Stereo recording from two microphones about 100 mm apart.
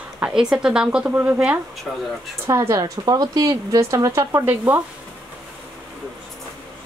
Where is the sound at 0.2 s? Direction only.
5° right (ahead or behind).